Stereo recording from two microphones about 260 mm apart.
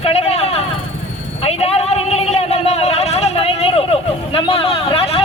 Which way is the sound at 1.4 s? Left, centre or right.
Left.